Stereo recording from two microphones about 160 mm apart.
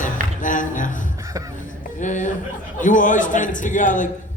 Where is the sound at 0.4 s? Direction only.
55° left (ahead or behind).